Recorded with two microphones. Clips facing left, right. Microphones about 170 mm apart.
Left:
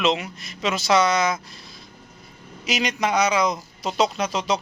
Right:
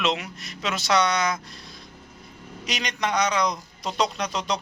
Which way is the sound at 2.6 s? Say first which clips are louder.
Left 5 dB; 5° left (ahead or behind).